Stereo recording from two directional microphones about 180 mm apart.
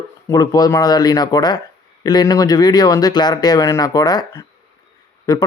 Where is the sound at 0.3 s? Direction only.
20° left (ahead or behind).